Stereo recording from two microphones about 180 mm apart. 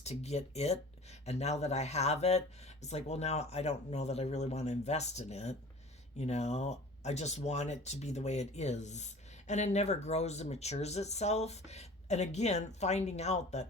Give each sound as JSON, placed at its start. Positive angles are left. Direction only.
{"t": 0.0, "sound": "speech", "side_deg": 35}